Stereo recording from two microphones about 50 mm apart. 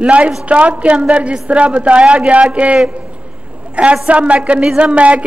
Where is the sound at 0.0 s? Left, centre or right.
Right.